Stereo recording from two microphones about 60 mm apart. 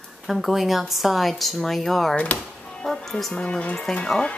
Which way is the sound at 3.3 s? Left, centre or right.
Centre.